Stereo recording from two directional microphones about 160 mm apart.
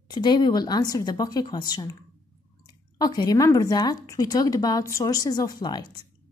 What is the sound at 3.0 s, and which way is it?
Speech, 25° left (ahead or behind).